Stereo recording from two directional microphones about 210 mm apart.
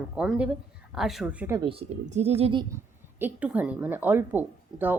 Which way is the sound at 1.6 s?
25° right (ahead or behind).